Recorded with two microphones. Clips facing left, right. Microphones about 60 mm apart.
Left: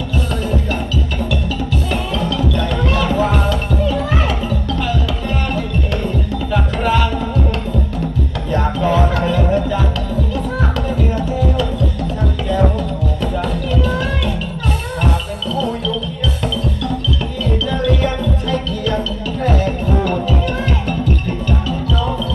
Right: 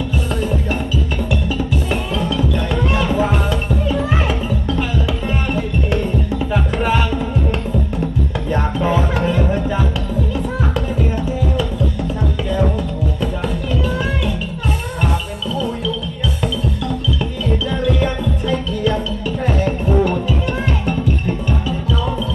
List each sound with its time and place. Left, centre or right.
1.9 s music: centre
6.5 s music: centre
8.4 s music: centre
10.8 s music: centre
13.4 s music: centre
17.7 s music: centre